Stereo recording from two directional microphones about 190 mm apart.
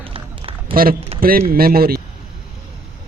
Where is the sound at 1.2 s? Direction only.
50° right (ahead or behind).